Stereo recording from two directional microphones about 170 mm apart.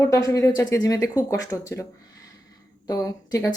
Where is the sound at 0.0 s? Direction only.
15° left (ahead or behind).